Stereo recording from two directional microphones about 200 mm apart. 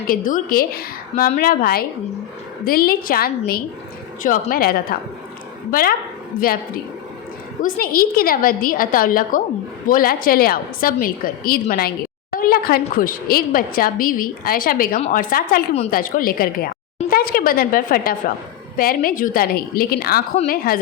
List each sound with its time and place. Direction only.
0.3 s a woman's voice: 45° left (ahead or behind)
7.6 s a woman's voice: 45° left (ahead or behind)